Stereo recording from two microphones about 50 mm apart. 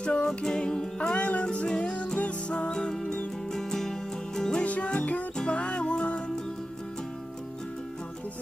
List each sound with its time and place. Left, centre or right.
0.0 s music: centre
2.7 s music: centre
4.6 s music: left